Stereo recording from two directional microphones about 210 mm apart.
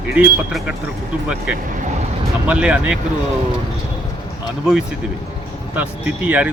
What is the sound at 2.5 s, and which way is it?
Speech, 5° right (ahead or behind).